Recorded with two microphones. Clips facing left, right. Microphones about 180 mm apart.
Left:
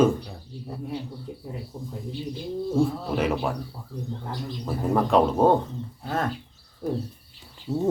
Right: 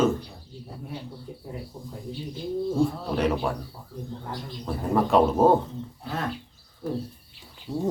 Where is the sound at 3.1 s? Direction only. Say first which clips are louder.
Even; centre (ahead or behind).